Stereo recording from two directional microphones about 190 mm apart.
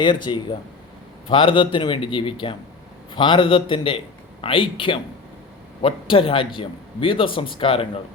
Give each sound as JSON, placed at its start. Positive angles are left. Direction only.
{"t": 0.0, "sound": "a man's voice", "side_deg": 25}